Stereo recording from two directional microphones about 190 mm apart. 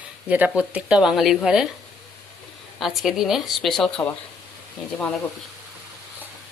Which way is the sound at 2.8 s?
Centre (ahead or behind).